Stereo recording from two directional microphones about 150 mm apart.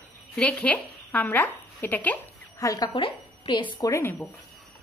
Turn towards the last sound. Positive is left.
turn(degrees=15)  # may be behind; listen again after turning